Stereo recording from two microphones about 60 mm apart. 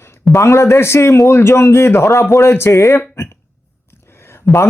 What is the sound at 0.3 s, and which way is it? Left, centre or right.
A man's voice, left.